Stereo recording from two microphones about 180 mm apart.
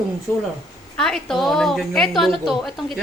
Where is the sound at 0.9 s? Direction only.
Centre (ahead or behind).